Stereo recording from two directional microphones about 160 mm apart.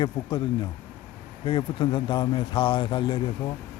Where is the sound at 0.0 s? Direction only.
30° left (ahead or behind).